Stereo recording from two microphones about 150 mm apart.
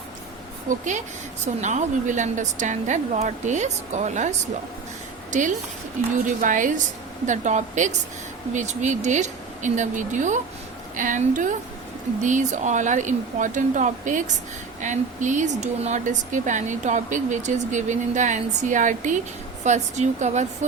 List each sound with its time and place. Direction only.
0.7 s a woman's voice: 55° right (ahead or behind)